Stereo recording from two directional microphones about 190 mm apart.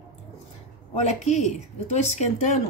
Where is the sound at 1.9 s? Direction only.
35° left (ahead or behind).